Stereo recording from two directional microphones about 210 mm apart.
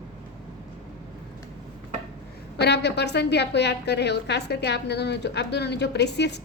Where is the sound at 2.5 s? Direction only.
55° left (ahead or behind).